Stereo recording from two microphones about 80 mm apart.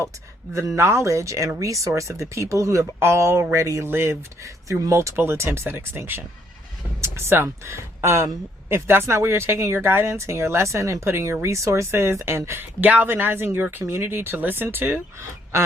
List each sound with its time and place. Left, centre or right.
0.8 s speech: right
12.8 s speech: centre